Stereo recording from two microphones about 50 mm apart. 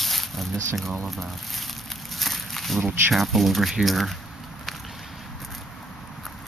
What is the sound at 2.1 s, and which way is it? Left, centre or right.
Walk, centre.